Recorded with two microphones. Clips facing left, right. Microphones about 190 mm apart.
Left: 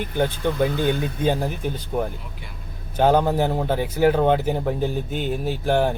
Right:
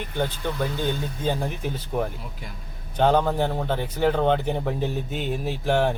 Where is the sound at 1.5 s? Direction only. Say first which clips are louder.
Left 2 dB; centre (ahead or behind).